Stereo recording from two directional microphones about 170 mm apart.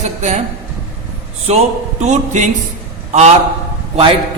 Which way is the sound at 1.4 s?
40° right (ahead or behind).